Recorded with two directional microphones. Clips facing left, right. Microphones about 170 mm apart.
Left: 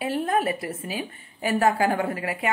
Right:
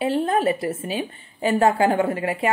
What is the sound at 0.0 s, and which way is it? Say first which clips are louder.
A woman's voice: right 4 dB; 30° right (ahead or behind).